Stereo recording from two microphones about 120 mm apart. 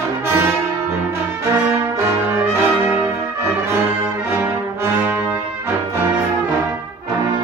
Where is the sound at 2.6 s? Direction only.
15° right (ahead or behind).